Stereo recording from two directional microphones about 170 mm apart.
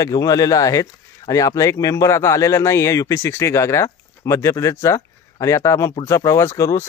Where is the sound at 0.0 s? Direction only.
20° left (ahead or behind).